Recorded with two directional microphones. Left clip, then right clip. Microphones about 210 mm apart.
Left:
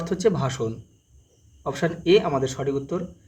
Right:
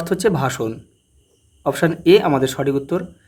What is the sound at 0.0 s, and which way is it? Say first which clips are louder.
Speech: right 4 dB; 40° right (ahead or behind).